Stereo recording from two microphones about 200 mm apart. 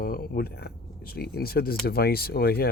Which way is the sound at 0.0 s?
50° left (ahead or behind).